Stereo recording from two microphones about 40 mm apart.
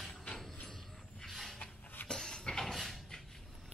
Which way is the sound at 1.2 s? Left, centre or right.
Centre.